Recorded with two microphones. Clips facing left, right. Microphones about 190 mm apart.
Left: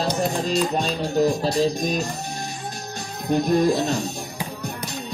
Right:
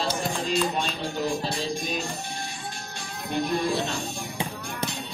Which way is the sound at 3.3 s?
40° left (ahead or behind).